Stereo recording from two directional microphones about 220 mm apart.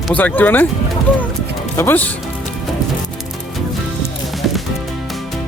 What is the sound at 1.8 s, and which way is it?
Speech, 10° left (ahead or behind).